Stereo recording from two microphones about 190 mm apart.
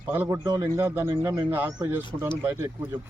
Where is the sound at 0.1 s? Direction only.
15° right (ahead or behind).